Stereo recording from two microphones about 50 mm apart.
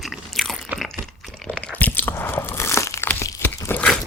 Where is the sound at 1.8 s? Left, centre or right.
Left.